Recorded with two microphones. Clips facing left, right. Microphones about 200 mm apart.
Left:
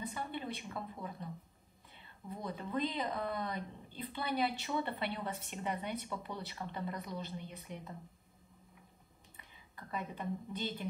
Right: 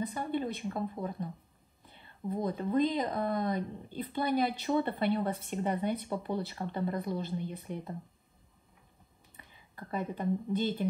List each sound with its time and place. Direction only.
0.0 s speech: 45° right (ahead or behind)
2.2 s speech: 45° right (ahead or behind)
9.8 s a woman's voice: 35° right (ahead or behind)